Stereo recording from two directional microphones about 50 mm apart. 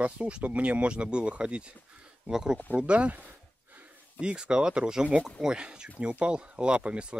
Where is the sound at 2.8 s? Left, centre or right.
Right.